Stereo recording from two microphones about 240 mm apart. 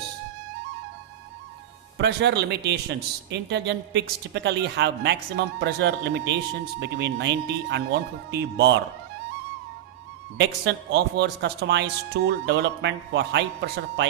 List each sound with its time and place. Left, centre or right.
2.0 s speech: right
10.3 s speech: right